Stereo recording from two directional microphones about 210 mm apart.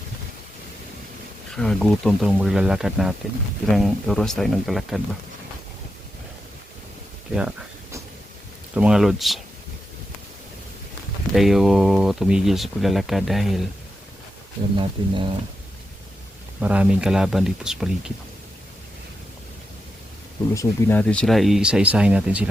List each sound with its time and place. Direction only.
1.5 s speech: centre (ahead or behind)
8.7 s speech: 5° right (ahead or behind)
11.3 s speech: centre (ahead or behind)
14.8 s speech: 25° right (ahead or behind)
16.6 s speech: 5° right (ahead or behind)
20.5 s speech: 15° left (ahead or behind); by 22.4 s 5° right (ahead or behind)